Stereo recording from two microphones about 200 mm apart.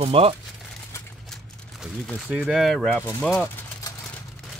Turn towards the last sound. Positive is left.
turn(degrees=5)  # may be behind; listen again after turning